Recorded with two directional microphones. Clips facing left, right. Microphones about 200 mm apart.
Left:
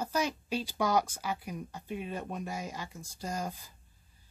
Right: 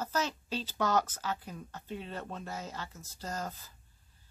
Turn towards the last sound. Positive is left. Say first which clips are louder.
# left 2 dB
turn(degrees=15)  # may be behind; listen again after turning